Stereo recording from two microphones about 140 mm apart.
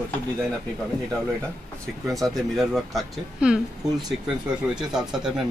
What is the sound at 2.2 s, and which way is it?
Speech, centre (ahead or behind).